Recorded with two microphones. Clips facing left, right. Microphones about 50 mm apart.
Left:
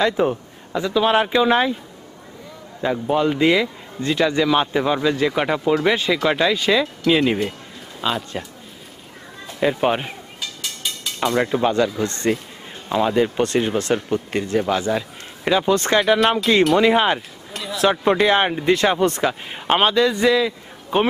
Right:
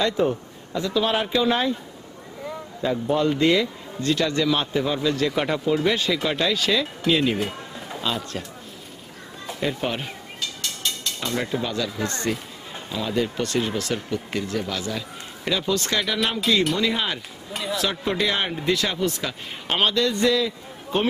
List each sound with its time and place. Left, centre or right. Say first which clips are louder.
0.0 s a man's voice: left 3 dB; centre
2.8 s a man's voice: left 3 dB; centre
9.6 s speech: left 7 dB; left
10.4 s a sound: even; centre
11.6 s speech: left 8 dB; left
17.5 s a sound: right 2 dB; centre
17.8 s a man's voice: left 10 dB; left